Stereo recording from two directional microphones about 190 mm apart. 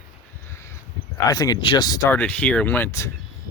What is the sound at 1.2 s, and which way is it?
Speech, 20° left (ahead or behind).